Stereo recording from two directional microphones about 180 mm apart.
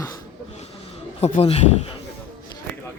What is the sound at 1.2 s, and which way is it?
Speech, 35° left (ahead or behind).